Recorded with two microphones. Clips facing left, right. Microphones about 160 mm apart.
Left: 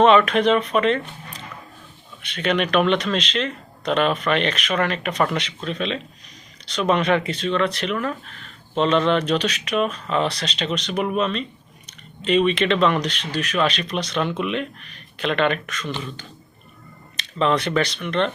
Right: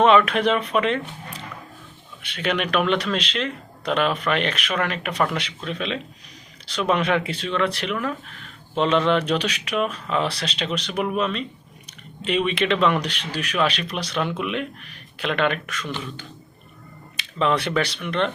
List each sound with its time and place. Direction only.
0.0 s speech: 5° right (ahead or behind)
2.2 s speech: 5° right (ahead or behind)
17.2 s speech: 5° right (ahead or behind)